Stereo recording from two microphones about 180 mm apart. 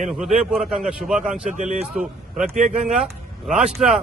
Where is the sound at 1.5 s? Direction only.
45° right (ahead or behind).